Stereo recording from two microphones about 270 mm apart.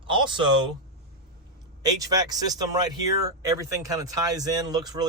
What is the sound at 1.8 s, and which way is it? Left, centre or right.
Speech, centre.